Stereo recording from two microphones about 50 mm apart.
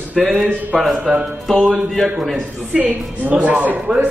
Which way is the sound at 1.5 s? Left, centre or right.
Centre.